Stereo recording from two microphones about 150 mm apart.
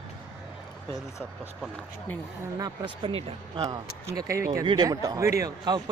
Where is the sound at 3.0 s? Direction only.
40° right (ahead or behind).